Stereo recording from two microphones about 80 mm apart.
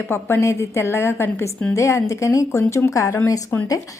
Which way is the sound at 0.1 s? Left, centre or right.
Left.